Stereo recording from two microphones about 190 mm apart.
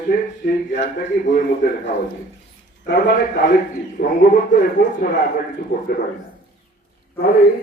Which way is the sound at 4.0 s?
50° left (ahead or behind).